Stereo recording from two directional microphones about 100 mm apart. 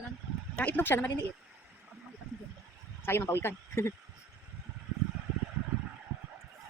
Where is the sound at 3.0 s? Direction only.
25° left (ahead or behind).